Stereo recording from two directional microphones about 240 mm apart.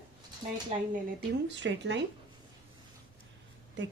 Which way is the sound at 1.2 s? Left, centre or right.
Right.